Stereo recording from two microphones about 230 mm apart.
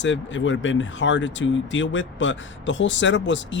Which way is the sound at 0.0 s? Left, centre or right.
Left.